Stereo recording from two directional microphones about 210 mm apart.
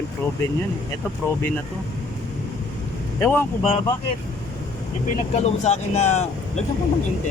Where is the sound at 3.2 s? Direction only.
10° left (ahead or behind).